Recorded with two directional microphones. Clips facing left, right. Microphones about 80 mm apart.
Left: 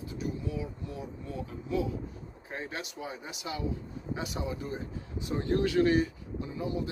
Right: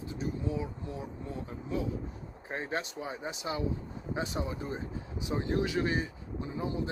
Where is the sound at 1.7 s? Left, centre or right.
Right.